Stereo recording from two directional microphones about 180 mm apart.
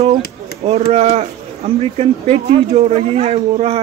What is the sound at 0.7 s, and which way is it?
Speech, 35° right (ahead or behind).